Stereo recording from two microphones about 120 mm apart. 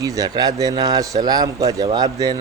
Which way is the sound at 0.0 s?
30° right (ahead or behind).